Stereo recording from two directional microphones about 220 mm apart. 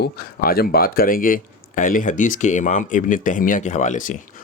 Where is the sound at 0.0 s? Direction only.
45° left (ahead or behind).